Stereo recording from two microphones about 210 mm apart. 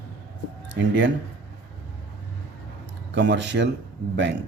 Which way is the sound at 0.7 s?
60° right (ahead or behind).